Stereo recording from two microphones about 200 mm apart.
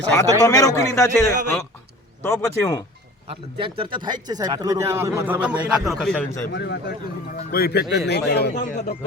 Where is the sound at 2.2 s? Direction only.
15° left (ahead or behind).